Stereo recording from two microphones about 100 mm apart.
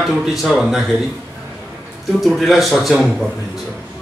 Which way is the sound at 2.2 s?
Centre (ahead or behind).